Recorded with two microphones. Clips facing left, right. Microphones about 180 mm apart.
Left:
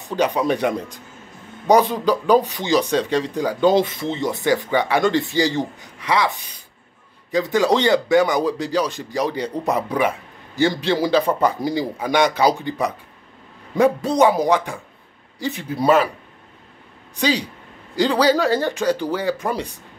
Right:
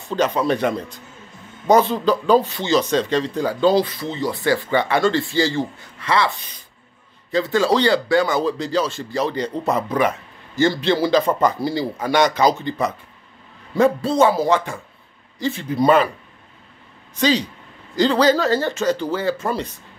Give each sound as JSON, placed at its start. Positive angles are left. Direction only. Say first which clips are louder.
{"t": 0.1, "sound": "speech", "louder": "even", "side_deg": 15}
{"t": 17.1, "sound": "speech", "louder": "right 2 dB", "side_deg": 10}